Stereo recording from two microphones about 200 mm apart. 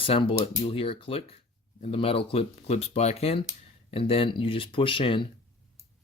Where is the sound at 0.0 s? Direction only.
25° left (ahead or behind).